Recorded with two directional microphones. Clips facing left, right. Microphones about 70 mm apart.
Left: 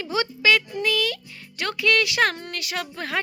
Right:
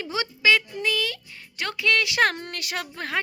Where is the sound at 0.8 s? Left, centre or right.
Right.